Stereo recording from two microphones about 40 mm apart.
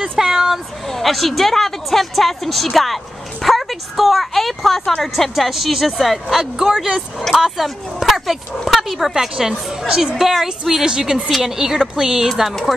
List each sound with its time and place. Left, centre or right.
0.2 s speech: centre
0.8 s a woman's voice: centre
5.3 s a woman's voice: centre
6.3 s a woman's voice: centre
10.1 s speech: centre
12.3 s a woman's voice: centre